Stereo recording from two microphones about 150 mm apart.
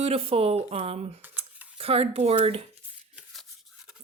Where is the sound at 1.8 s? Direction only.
40° right (ahead or behind).